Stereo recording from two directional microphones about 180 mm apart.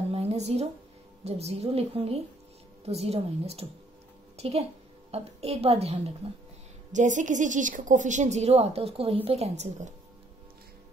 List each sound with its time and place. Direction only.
0.1 s music: 35° right (ahead or behind)
1.2 s a woman's voice: 35° right (ahead or behind)